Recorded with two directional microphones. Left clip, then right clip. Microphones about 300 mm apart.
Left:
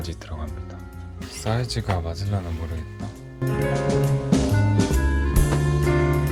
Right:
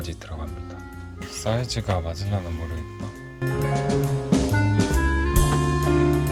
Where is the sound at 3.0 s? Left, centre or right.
Centre.